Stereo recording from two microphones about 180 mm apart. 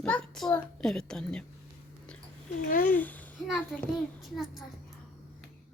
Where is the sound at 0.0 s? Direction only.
5° left (ahead or behind).